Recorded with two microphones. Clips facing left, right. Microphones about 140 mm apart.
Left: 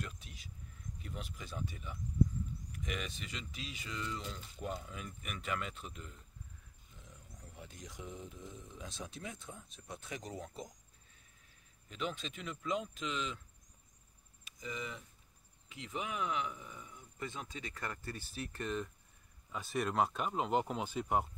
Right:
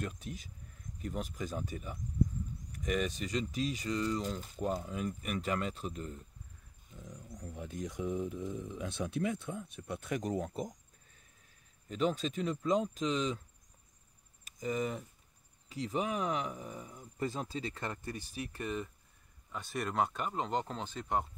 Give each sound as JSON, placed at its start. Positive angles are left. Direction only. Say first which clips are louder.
{"t": 0.0, "sound": "speech", "louder": "right 7 dB", "side_deg": -45}
{"t": 7.3, "sound": "speech", "louder": "right 11 dB", "side_deg": -45}
{"t": 11.9, "sound": "speech", "louder": "right 8 dB", "side_deg": -40}
{"t": 14.4, "sound": "speech", "louder": "right 9 dB", "side_deg": -45}